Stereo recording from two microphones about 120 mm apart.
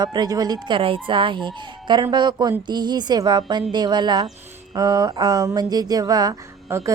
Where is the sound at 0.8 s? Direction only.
45° right (ahead or behind).